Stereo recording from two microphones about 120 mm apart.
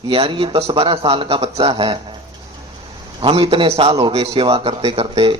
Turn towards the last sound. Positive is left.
turn(degrees=-45)  # may be behind; listen again after turning